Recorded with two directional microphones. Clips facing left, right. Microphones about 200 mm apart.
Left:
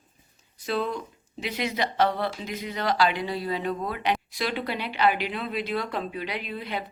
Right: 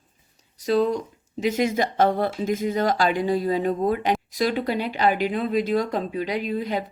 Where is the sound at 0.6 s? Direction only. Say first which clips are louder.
Right 7 dB; 40° right (ahead or behind).